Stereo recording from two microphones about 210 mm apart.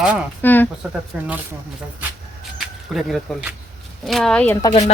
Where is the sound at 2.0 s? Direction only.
Centre (ahead or behind).